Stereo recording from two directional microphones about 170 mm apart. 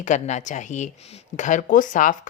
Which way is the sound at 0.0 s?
45° left (ahead or behind).